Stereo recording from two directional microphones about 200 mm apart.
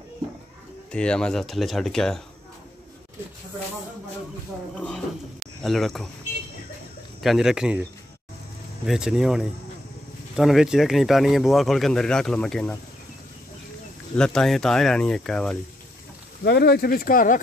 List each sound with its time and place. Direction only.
0.9 s speech: 5° left (ahead or behind)
4.7 s speech: 5° left (ahead or behind)
7.2 s speech: centre (ahead or behind)
8.8 s speech: centre (ahead or behind)
14.1 s speech: 5° left (ahead or behind)
16.4 s speech: 55° left (ahead or behind)